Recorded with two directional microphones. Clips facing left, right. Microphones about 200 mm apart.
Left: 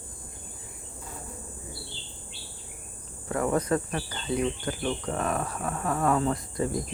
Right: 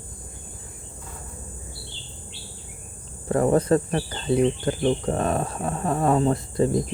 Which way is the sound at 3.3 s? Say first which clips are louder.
Right 7 dB; 35° right (ahead or behind).